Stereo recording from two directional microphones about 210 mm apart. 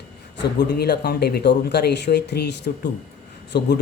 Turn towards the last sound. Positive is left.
turn(degrees=50)  # may be behind; listen again after turning